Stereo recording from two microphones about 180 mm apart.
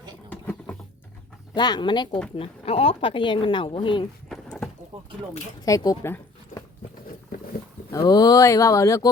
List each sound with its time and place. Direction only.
0.3 s patter: 10° left (ahead or behind)
1.5 s speech: 25° left (ahead or behind)
4.3 s a sound: 5° left (ahead or behind)
5.6 s speech: 20° left (ahead or behind)
7.9 s speech: 20° left (ahead or behind)